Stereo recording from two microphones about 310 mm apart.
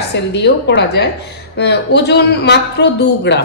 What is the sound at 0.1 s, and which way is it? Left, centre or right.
A woman's voice, left.